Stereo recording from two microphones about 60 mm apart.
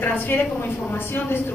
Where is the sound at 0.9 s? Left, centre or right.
Left.